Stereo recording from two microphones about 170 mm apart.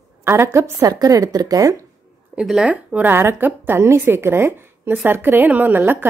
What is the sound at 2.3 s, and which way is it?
Speech, 5° right (ahead or behind).